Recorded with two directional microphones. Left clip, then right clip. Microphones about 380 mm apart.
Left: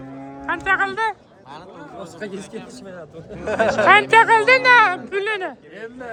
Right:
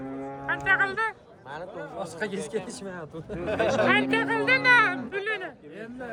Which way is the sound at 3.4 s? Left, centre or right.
Left.